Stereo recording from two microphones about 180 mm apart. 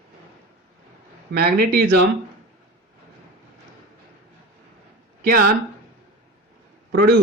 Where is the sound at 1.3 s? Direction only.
55° right (ahead or behind).